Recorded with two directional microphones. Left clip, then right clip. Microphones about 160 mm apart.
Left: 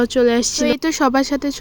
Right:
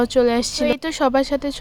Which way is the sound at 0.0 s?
10° left (ahead or behind).